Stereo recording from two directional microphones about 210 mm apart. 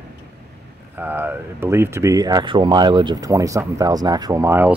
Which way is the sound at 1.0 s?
10° right (ahead or behind).